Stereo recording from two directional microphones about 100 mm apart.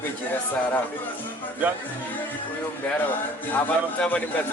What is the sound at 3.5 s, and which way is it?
Speech, 15° left (ahead or behind).